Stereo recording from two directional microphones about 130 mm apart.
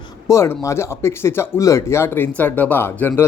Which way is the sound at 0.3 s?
20° left (ahead or behind).